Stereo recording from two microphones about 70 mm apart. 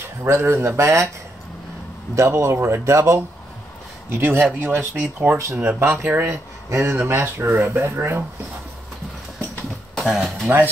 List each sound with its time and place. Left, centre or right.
0.2 s a man's voice: right
2.1 s a man's voice: right
4.1 s speech: right
6.3 s speech: right
7.7 s a man's voice: right
9.9 s speech: centre